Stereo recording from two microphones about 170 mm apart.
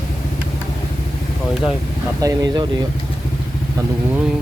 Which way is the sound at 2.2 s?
25° right (ahead or behind).